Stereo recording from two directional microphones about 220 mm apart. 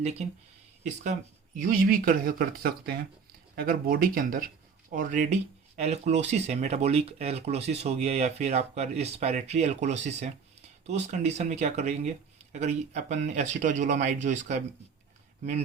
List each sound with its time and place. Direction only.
0.0 s speech: 30° right (ahead or behind)
1.5 s speech: 40° right (ahead or behind)